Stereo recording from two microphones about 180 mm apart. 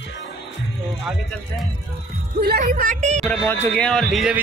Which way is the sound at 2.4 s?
45° right (ahead or behind).